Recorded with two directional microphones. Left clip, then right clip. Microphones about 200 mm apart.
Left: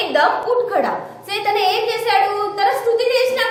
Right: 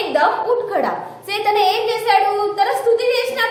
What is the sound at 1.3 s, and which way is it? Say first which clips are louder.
A woman's voice: right 1 dB; 15° right (ahead or behind).